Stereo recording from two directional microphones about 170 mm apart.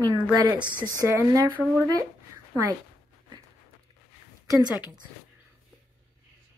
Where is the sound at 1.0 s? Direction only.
15° right (ahead or behind).